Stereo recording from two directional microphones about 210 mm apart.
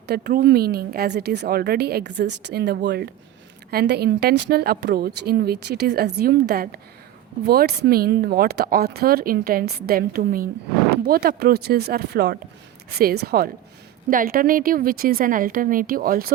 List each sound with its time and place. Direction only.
0.1 s speech: 50° right (ahead or behind)